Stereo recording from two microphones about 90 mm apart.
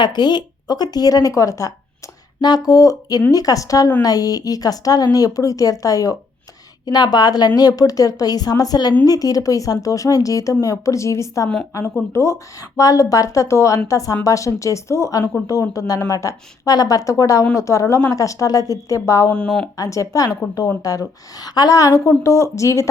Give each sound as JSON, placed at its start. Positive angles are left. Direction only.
{"t": 0.0, "sound": "speech", "side_deg": 55}
{"t": 2.4, "sound": "speech", "side_deg": 50}
{"t": 19.3, "sound": "speech", "side_deg": 10}
{"t": 19.7, "sound": "speech", "side_deg": 40}